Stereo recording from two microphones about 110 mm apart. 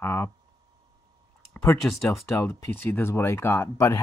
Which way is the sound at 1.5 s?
25° left (ahead or behind).